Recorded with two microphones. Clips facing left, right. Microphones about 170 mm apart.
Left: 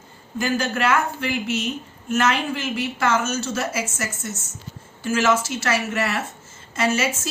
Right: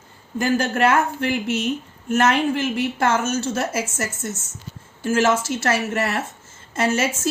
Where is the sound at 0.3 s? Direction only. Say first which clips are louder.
Right 3 dB; 50° right (ahead or behind).